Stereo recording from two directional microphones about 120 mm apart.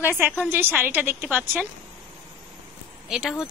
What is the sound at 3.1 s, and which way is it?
Speech, 5° right (ahead or behind).